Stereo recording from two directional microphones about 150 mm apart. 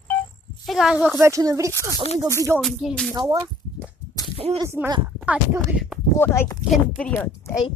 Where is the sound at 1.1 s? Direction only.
20° right (ahead or behind).